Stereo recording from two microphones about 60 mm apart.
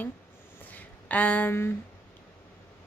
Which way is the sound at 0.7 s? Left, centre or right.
Left.